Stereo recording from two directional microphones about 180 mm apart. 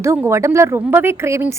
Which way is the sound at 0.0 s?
15° right (ahead or behind).